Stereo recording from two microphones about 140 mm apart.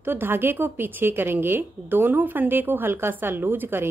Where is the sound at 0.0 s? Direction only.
15° right (ahead or behind).